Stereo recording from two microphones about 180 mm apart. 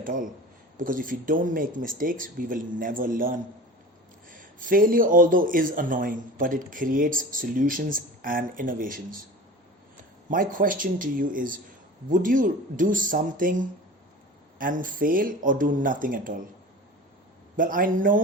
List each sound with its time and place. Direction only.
0.0 s speech: 50° right (ahead or behind)
10.2 s speech: 50° right (ahead or behind)
14.6 s speech: 50° right (ahead or behind)
17.6 s speech: 50° right (ahead or behind)